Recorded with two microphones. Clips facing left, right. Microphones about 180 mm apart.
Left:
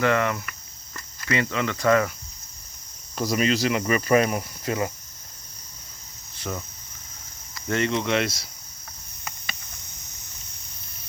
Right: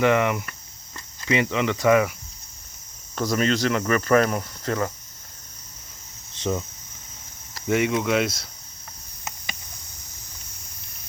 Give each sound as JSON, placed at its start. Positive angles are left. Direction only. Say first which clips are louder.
{"t": 0.0, "sound": "speech", "louder": "right 3 dB", "side_deg": -15}
{"t": 3.2, "sound": "speech", "louder": "right 1 dB", "side_deg": 5}
{"t": 6.3, "sound": "speech", "louder": "right 6 dB", "side_deg": -20}
{"t": 7.7, "sound": "speech", "louder": "right 2 dB", "side_deg": -10}